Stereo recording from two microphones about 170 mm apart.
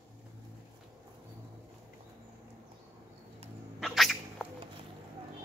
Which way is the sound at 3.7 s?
Centre (ahead or behind).